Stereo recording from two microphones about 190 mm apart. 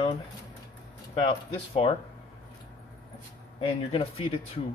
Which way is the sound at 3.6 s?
25° left (ahead or behind).